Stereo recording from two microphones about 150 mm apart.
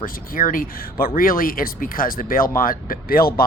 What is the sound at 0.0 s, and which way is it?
Speech, 65° left (ahead or behind).